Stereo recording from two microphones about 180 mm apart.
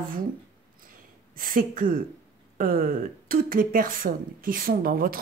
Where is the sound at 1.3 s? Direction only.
50° right (ahead or behind).